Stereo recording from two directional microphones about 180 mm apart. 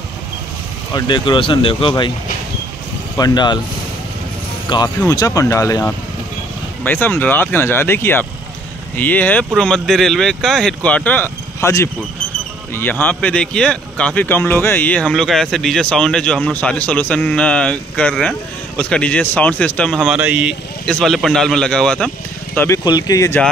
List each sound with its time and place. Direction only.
0.9 s speech: 25° left (ahead or behind)
3.2 s speech: 20° left (ahead or behind)
4.6 s speech: 20° left (ahead or behind); by 20.5 s 5° right (ahead or behind)
20.8 s speech: 5° left (ahead or behind)
22.6 s speech: 20° left (ahead or behind)